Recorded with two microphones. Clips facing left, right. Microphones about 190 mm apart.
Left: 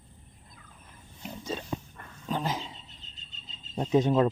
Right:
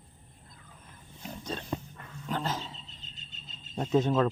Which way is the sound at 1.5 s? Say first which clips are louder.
Left 1 dB; 5° left (ahead or behind).